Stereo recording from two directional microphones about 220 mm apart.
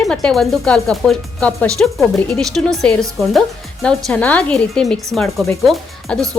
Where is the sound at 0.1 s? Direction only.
5° left (ahead or behind).